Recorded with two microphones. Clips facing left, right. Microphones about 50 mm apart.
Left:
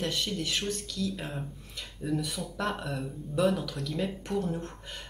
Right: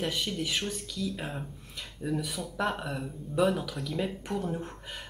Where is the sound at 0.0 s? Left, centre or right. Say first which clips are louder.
Even; centre.